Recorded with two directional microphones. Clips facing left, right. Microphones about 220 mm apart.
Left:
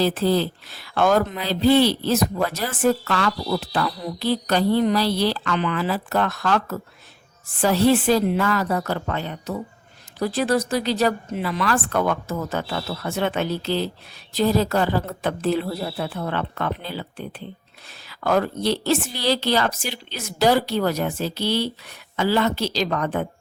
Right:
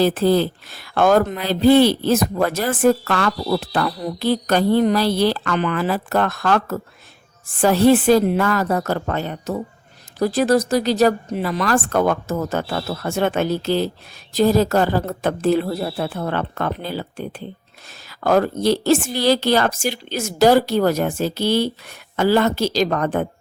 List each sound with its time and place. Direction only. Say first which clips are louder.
0.0 s speech: right 4 dB; 50° right (ahead or behind)